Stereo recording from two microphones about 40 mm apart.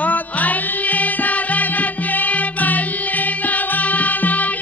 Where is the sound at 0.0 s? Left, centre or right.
Left.